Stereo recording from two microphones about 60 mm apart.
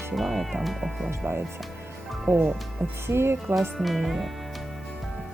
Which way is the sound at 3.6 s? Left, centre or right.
Centre.